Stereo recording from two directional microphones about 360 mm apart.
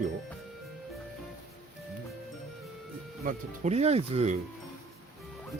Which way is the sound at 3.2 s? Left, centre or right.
Right.